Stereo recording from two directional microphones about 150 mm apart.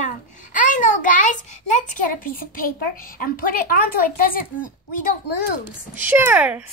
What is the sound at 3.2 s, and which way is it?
A woman's voice, 75° left (ahead or behind).